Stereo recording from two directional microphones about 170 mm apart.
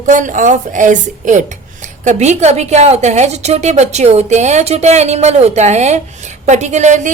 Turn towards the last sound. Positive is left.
turn(degrees=-45)  # may be behind; listen again after turning